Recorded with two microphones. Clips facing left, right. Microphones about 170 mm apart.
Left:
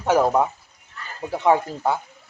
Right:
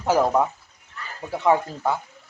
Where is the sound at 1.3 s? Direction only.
15° left (ahead or behind).